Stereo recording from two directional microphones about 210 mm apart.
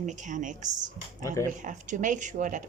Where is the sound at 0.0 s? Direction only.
35° right (ahead or behind).